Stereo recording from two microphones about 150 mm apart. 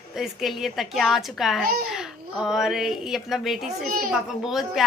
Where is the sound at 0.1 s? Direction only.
Centre (ahead or behind).